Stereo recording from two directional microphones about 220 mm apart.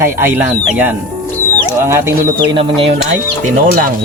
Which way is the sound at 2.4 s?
25° right (ahead or behind).